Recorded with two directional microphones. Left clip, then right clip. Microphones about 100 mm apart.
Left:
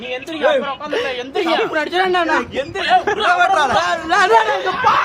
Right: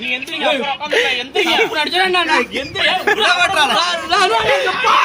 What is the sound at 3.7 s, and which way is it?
Speech, 90° left.